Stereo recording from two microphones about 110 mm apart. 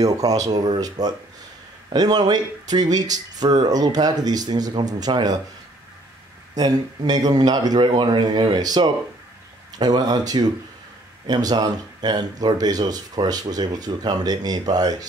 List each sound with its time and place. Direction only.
0.0 s speech: 35° right (ahead or behind)
6.5 s speech: 35° right (ahead or behind)